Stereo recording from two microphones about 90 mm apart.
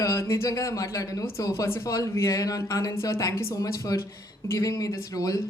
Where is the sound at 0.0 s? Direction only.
35° left (ahead or behind).